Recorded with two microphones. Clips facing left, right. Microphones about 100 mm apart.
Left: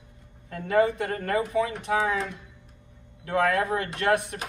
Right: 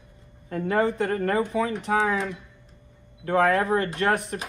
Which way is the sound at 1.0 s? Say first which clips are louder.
Right 3 dB; 35° right (ahead or behind).